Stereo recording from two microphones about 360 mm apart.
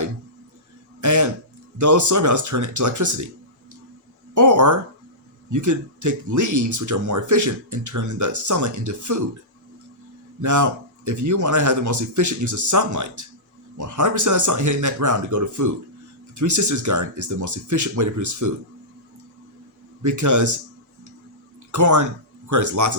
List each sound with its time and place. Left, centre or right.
1.0 s a sound: right
1.8 s speech: right
4.4 s speech: right
10.4 s speech: right
20.0 s speech: right
21.7 s speech: right